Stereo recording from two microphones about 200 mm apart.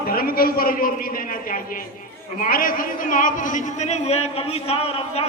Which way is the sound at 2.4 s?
45° left (ahead or behind).